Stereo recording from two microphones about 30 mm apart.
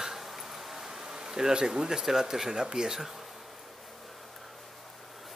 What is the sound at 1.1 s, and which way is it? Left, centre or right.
Speech, right.